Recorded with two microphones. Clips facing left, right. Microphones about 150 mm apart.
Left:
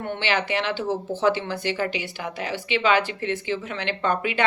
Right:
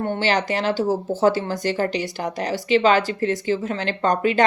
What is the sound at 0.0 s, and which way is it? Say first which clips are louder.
Speech: right 4 dB; 40° right (ahead or behind).